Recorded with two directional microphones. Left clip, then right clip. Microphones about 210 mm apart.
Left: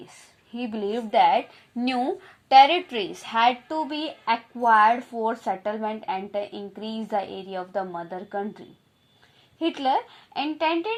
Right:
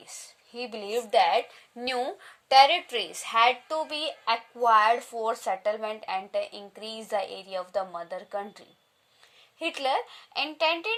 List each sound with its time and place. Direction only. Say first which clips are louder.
0.8 s a woman's voice: left 3 dB; 55° right (ahead or behind)
1.8 s a woman's voice: left 4 dB; 40° right (ahead or behind)